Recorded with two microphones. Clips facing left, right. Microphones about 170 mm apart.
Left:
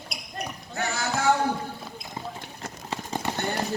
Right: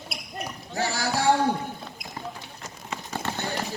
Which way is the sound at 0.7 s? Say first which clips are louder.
Right 2 dB; 35° right (ahead or behind).